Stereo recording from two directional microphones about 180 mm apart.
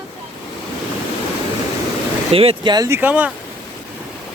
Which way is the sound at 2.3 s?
30° right (ahead or behind).